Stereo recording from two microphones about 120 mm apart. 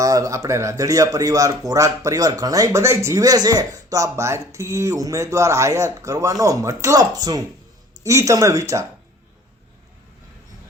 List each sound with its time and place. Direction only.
0.0 s speech: 30° right (ahead or behind)